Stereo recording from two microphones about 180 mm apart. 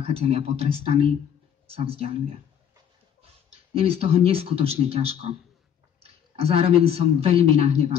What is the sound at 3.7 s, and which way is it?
A woman's voice, 35° right (ahead or behind).